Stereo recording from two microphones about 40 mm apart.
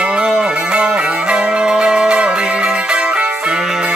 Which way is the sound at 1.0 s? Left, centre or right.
Right.